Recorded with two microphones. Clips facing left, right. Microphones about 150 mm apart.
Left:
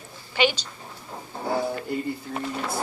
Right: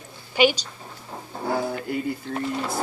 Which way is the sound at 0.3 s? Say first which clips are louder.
Right 4 dB; 15° right (ahead or behind).